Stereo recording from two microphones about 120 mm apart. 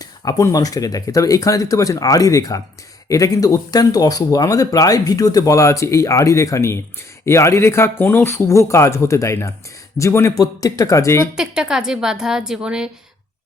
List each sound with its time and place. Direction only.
0.0 s speech: 30° left (ahead or behind)
11.3 s a woman's voice: 5° right (ahead or behind)